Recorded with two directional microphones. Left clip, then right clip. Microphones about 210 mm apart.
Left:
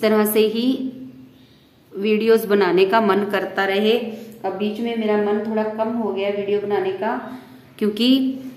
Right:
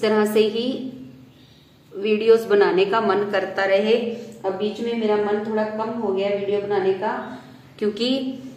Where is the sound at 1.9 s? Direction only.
40° left (ahead or behind).